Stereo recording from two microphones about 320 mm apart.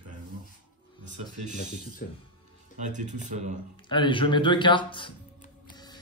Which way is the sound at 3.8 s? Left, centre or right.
Centre.